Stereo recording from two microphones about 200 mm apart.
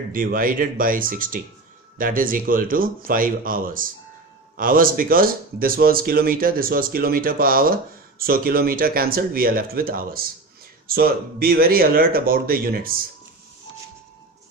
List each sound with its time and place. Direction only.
0.1 s speech: 45° right (ahead or behind)